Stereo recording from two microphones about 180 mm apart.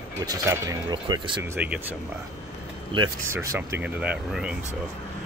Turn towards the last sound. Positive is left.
turn(degrees=-5)  # may be behind; listen again after turning